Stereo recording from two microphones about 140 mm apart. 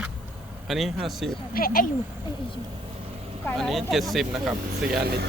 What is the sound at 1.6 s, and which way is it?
Speech, 90° left.